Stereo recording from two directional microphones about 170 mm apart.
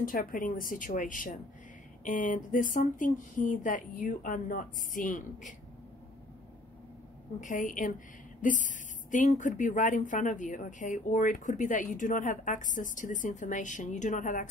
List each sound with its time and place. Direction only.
0.0 s speech: 55° left (ahead or behind)
7.3 s speech: 50° left (ahead or behind)